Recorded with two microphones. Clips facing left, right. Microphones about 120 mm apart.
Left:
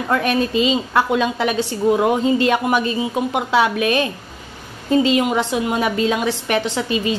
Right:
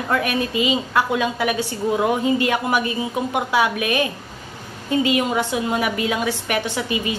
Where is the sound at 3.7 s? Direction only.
20° right (ahead or behind).